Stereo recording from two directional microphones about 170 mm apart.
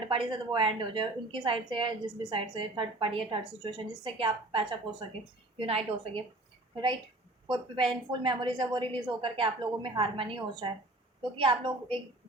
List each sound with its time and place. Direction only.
0.1 s a woman's voice: 30° right (ahead or behind)
7.4 s a woman's voice: 25° right (ahead or behind)